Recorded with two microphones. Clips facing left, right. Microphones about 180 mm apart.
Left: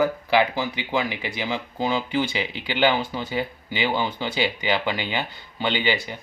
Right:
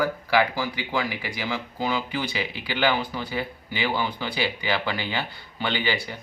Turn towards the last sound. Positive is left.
turn(degrees=20)  # may be behind; listen again after turning